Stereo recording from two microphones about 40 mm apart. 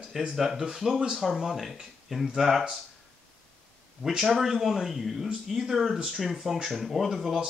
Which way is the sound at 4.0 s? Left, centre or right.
Centre.